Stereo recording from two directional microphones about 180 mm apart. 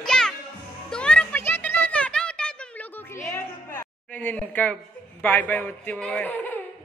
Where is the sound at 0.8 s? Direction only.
5° left (ahead or behind).